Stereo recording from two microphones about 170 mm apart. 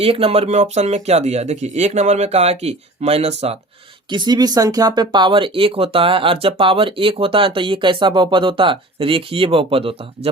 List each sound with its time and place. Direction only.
0.0 s speech: 35° right (ahead or behind)
4.1 s speech: 25° right (ahead or behind)